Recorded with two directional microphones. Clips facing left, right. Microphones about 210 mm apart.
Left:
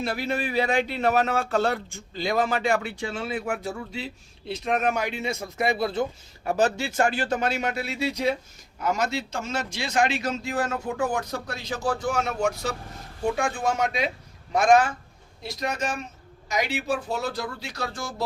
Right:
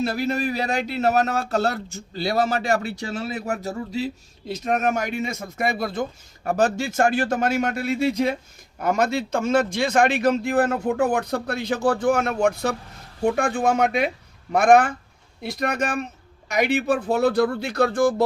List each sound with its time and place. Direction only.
0.1 s a man's voice: 40° right (ahead or behind); by 18.3 s 55° right (ahead or behind)